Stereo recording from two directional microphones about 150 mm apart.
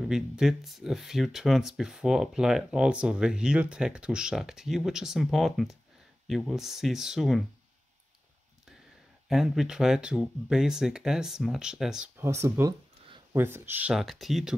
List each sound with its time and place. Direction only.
0.1 s speech: 5° right (ahead or behind)
9.3 s speech: 5° right (ahead or behind)
12.2 s speech: 20° right (ahead or behind); by 14.6 s centre (ahead or behind)